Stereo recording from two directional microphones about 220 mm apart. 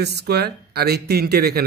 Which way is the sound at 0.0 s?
45° right (ahead or behind).